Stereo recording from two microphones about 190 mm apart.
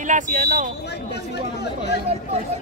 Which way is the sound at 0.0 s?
40° right (ahead or behind).